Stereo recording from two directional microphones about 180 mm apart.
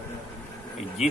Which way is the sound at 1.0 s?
40° left (ahead or behind).